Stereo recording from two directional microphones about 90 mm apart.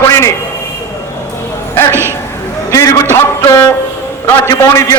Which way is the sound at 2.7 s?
35° left (ahead or behind).